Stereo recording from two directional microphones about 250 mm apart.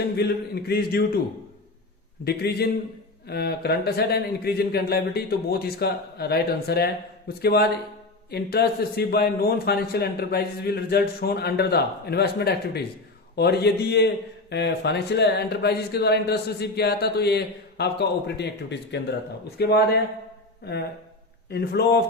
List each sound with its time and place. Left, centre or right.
0.2 s speech: left
2.2 s speech: left
21.5 s speech: left